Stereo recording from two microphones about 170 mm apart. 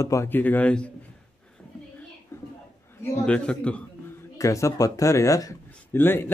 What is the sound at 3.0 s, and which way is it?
Speech, 10° left (ahead or behind).